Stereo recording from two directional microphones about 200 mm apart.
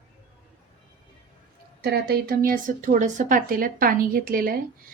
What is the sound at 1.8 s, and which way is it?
A woman's voice, 50° right (ahead or behind).